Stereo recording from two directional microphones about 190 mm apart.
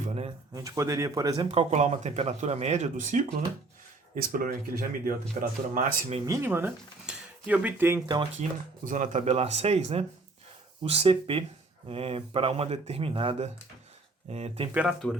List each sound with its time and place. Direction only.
0.5 s speech: 15° right (ahead or behind); by 6.1 s 45° right (ahead or behind)
6.2 s speech: 15° right (ahead or behind)
8.4 s speech: 40° right (ahead or behind)
14.7 s speech: 5° right (ahead or behind)